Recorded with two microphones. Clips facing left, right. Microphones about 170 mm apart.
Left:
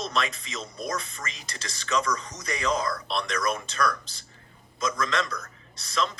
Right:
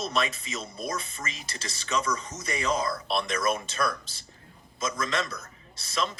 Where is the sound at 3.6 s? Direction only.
25° right (ahead or behind).